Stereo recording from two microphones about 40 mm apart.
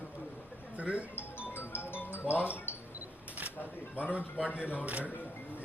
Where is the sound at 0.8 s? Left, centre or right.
Right.